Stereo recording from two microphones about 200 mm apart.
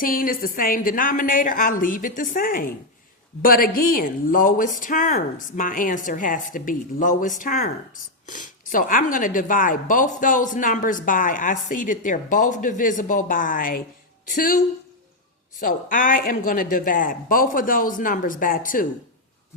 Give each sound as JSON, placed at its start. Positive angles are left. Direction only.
{"t": 0.0, "sound": "a woman's voice", "side_deg": 45}
{"t": 15.6, "sound": "speech", "side_deg": 45}